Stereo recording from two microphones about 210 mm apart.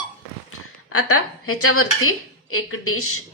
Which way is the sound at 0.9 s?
90° left.